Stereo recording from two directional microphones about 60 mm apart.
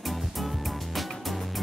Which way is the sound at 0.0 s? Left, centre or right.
Centre.